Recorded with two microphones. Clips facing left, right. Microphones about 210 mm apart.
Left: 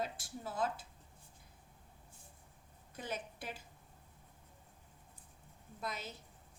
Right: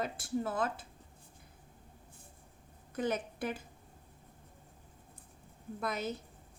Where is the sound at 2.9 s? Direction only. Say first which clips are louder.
Right 9 dB; 55° right (ahead or behind).